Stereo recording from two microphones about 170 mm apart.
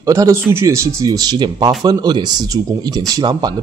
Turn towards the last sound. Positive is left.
turn(degrees=-25)  # may be behind; listen again after turning